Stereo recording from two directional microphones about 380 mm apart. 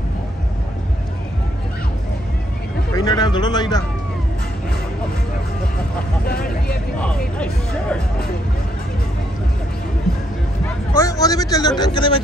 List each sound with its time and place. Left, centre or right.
2.9 s speech: centre
6.2 s vehicle: left
7.0 s hubbub: centre
11.0 s a man's voice: centre